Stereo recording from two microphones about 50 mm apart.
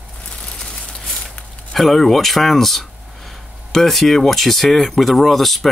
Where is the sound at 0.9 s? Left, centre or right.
Centre.